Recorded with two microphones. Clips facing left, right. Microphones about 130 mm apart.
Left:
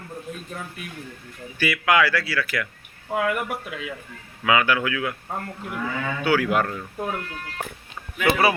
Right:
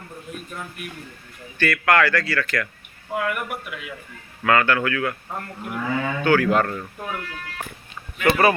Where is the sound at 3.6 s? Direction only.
30° left (ahead or behind).